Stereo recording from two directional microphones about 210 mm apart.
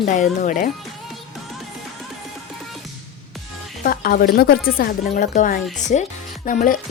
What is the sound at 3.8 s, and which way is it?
Speech, 45° left (ahead or behind).